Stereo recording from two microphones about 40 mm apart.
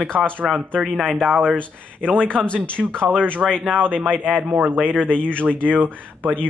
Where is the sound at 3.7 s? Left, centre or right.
Right.